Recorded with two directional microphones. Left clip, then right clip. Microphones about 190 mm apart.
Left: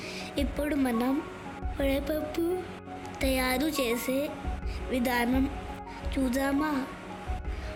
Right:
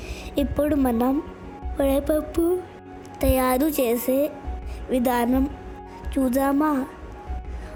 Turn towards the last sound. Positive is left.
turn(degrees=-40)  # may be behind; listen again after turning